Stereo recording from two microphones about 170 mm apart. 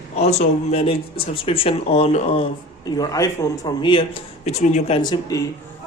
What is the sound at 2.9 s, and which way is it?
Speech, 20° left (ahead or behind).